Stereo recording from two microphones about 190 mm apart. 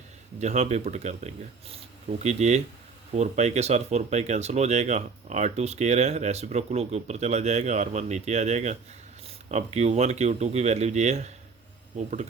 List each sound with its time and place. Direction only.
0.3 s speech: 35° right (ahead or behind)